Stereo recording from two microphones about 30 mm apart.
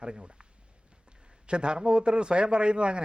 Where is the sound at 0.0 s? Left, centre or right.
Right.